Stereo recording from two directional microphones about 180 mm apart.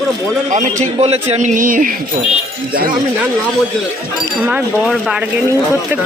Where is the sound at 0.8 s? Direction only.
35° right (ahead or behind).